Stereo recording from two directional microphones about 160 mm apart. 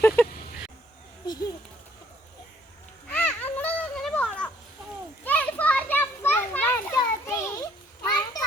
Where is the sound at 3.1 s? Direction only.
10° left (ahead or behind).